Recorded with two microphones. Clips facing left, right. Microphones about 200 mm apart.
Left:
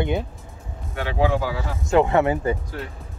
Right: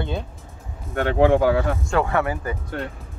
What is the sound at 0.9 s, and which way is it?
Speech, 55° right (ahead or behind).